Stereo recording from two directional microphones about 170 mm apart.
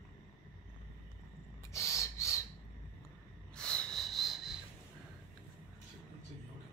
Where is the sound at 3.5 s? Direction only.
5° left (ahead or behind).